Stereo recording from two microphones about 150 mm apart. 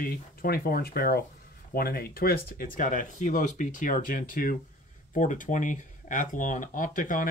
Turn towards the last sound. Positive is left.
turn(degrees=65)  # may be behind; listen again after turning